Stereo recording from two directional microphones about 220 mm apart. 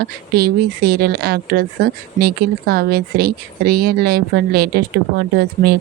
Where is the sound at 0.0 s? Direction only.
45° right (ahead or behind).